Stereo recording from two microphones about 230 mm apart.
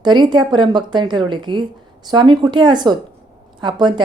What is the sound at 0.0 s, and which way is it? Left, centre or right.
A woman's voice, centre.